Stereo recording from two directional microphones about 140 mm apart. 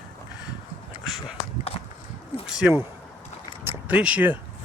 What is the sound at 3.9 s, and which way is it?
Speech, 10° right (ahead or behind).